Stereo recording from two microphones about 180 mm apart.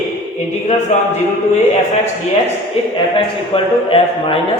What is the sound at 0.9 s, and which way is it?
Speech, 40° left (ahead or behind).